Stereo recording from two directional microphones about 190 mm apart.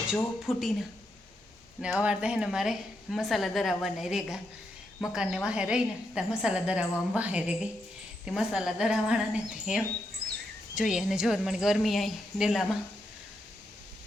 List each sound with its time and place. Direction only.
0.4 s a woman's voice: centre (ahead or behind)